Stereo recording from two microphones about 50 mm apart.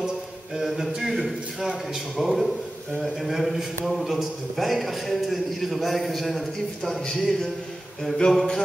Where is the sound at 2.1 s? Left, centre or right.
Centre.